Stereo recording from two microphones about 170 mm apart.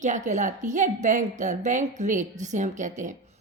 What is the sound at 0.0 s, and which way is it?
A woman's voice, 45° right (ahead or behind).